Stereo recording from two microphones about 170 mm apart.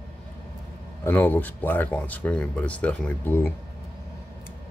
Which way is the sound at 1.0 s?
10° left (ahead or behind).